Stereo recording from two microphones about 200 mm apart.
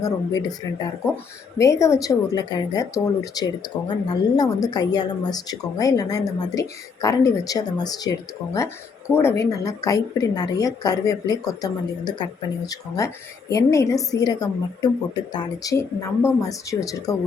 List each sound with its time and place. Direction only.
1.1 s speech: 15° left (ahead or behind)